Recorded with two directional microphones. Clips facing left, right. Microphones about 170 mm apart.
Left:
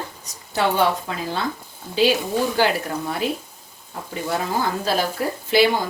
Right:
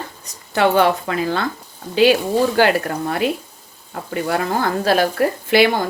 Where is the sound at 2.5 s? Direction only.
65° right (ahead or behind).